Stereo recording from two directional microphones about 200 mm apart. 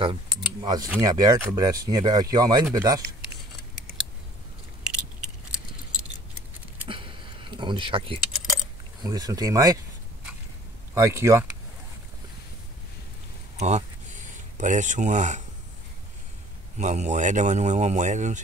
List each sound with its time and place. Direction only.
0.0 s speech: 25° right (ahead or behind)
4.8 s keys jangling: 5° right (ahead or behind)
6.9 s a sound: 25° right (ahead or behind)
9.0 s speech: 20° right (ahead or behind)
11.0 s speech: 15° right (ahead or behind)
13.6 s a sound: 35° right (ahead or behind)
16.7 s a man's voice: 35° right (ahead or behind)